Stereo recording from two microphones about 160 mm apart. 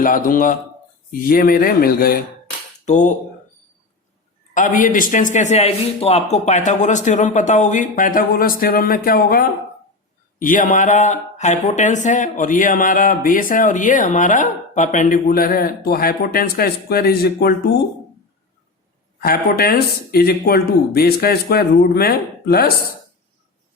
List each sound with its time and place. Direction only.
0.0 s speech: 60° left (ahead or behind)
2.8 s speech: 50° left (ahead or behind)
4.5 s speech: 55° left (ahead or behind)
10.4 s speech: 55° left (ahead or behind); by 17.5 s 75° left (ahead or behind)
19.2 s speech: 70° left (ahead or behind)